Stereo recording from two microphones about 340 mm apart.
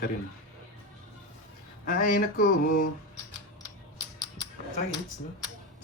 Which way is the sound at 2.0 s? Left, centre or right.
Left.